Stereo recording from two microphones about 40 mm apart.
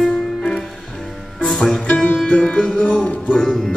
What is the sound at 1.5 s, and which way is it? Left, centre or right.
Music, centre.